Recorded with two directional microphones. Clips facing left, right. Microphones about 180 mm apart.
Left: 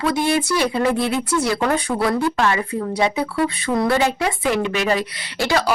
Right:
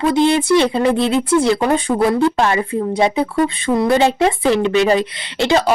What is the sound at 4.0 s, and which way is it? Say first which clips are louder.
Speech: right 5 dB; 25° right (ahead or behind).